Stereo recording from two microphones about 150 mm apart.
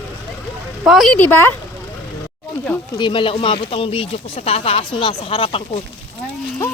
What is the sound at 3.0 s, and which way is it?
Speech, 35° left (ahead or behind).